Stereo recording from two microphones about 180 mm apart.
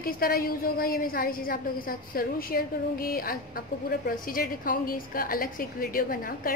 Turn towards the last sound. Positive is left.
turn(degrees=55)  # may be behind; listen again after turning